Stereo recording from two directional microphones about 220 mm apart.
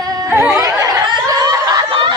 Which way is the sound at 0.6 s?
15° right (ahead or behind).